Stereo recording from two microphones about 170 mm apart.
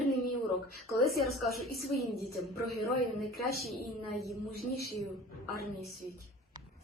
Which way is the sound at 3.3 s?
Centre (ahead or behind).